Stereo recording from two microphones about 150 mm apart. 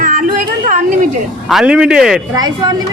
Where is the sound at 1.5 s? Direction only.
5° right (ahead or behind).